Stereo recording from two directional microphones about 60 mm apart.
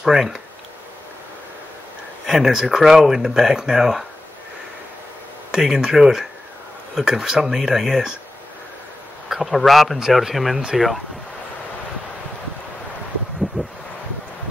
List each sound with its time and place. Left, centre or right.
0.0 s speech: centre
2.2 s speech: centre
5.5 s speech: centre
9.3 s speech: centre
13.6 s a sound: centre